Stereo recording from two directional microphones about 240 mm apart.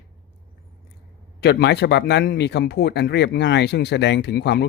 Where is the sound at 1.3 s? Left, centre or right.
Left.